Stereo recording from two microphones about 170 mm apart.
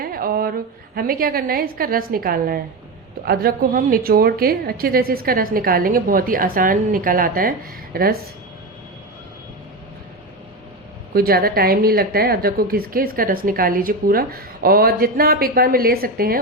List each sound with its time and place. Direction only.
0.0 s a sound: 60° right (ahead or behind)
0.9 s a woman's voice: 60° right (ahead or behind)
11.1 s a woman's voice: 65° right (ahead or behind)